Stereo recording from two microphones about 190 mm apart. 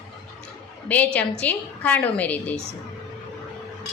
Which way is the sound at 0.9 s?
10° left (ahead or behind).